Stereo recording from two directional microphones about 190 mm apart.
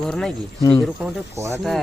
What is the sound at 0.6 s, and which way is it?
Speech, 25° left (ahead or behind).